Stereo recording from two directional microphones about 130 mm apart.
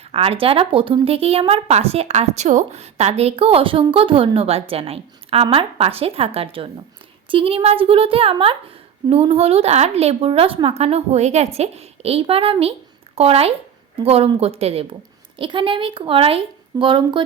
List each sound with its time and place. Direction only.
0.1 s a woman's voice: 45° right (ahead or behind)
15.4 s speech: 40° right (ahead or behind)